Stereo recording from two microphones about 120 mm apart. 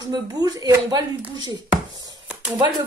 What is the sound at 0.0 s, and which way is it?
Speech, 30° right (ahead or behind).